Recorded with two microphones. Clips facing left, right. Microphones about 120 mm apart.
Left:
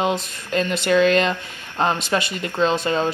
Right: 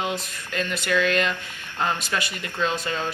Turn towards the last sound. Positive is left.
turn(degrees=25)  # may be behind; listen again after turning